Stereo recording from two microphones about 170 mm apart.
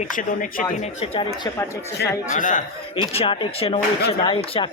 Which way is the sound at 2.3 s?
50° left (ahead or behind).